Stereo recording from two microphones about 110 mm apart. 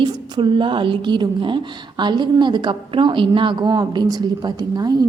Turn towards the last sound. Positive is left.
turn(degrees=-35)  # may be behind; listen again after turning